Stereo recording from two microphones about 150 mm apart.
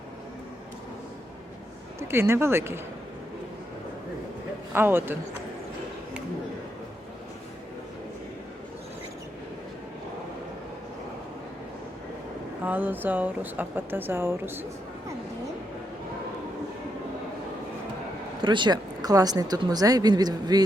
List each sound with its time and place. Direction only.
2.0 s a woman's voice: 15° right (ahead or behind)
4.7 s a woman's voice: 15° right (ahead or behind)
12.6 s a woman's voice: 10° right (ahead or behind)
18.4 s speech: 30° right (ahead or behind)